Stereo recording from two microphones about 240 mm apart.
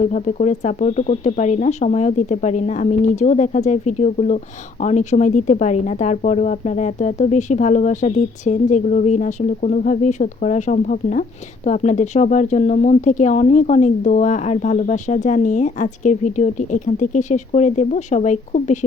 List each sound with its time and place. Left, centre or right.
0.1 s speech: left